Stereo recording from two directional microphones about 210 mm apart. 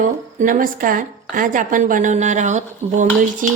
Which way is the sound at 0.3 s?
40° right (ahead or behind).